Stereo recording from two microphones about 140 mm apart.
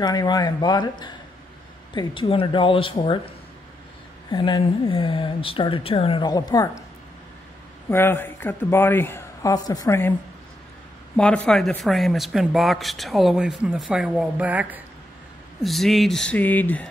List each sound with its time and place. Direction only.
0.0 s speech: 30° left (ahead or behind)
4.3 s speech: 35° left (ahead or behind)
6.2 s speech: 25° left (ahead or behind)
7.9 s a woman's voice: 15° left (ahead or behind)
11.1 s speech: 5° left (ahead or behind); by 14.8 s 10° right (ahead or behind)
15.6 s speech: centre (ahead or behind)